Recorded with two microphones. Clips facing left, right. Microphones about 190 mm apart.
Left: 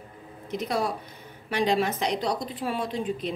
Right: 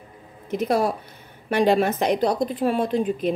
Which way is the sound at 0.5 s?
55° right (ahead or behind).